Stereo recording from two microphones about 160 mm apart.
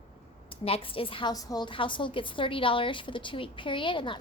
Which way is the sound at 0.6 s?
35° left (ahead or behind).